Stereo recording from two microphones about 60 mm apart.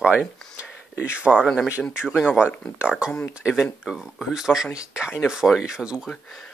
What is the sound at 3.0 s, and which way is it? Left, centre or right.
Speech, centre.